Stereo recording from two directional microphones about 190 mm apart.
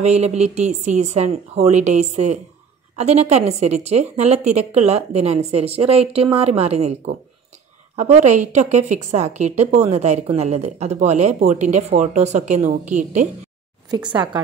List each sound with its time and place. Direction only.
0.0 s a woman's voice: 35° right (ahead or behind)
14.1 s a woman's voice: 20° right (ahead or behind)